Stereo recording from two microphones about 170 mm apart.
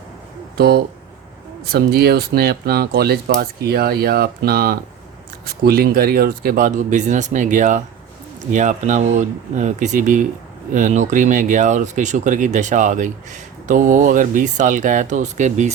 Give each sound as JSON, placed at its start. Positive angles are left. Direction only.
{"t": 0.5, "sound": "speech", "side_deg": -65}